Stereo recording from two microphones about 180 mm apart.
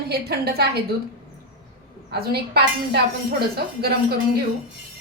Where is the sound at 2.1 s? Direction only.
65° right (ahead or behind).